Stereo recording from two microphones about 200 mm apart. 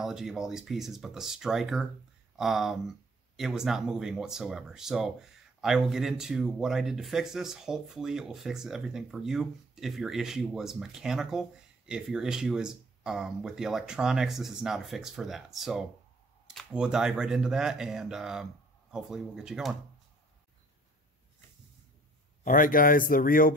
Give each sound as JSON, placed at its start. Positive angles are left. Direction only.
{"t": 0.0, "sound": "speech", "side_deg": 0}
{"t": 22.4, "sound": "speech", "side_deg": 40}